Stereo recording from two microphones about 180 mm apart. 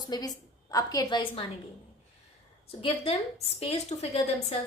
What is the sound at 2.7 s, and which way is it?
Speech, 30° left (ahead or behind).